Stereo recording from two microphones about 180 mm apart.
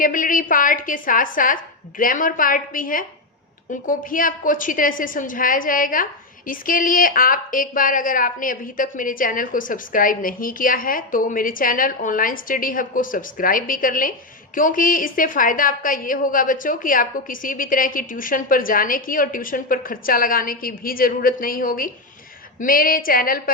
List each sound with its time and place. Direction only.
0.0 s a woman's voice: 50° left (ahead or behind)